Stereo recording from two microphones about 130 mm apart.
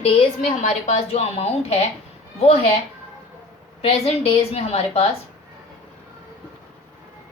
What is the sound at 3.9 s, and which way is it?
A woman's voice, 50° left (ahead or behind).